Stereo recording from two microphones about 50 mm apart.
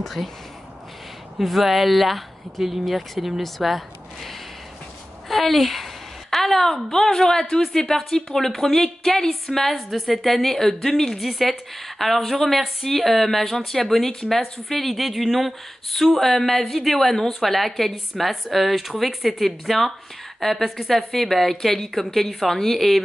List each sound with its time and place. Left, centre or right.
0.0 s a woman's voice: centre
1.4 s a woman's voice: centre
5.3 s a woman's voice: centre